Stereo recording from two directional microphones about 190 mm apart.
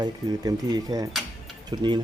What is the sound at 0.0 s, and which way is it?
Speech, 20° right (ahead or behind).